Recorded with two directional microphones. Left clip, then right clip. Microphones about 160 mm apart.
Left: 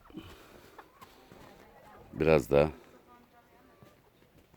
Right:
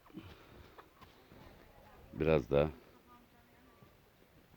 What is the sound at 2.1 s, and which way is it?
Speech, 20° left (ahead or behind).